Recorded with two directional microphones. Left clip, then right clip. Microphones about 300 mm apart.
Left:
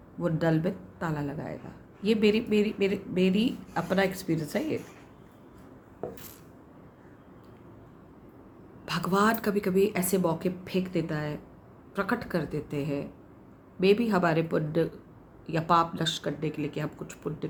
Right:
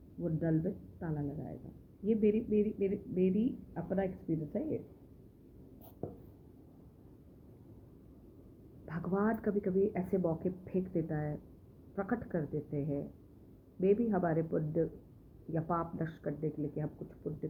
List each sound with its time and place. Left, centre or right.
0.3 s speech: centre
8.9 s speech: left